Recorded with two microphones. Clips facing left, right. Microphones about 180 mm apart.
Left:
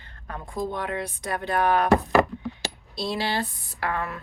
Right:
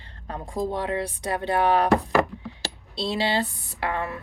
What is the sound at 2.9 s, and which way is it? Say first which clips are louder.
Speech: right 3 dB; 25° right (ahead or behind).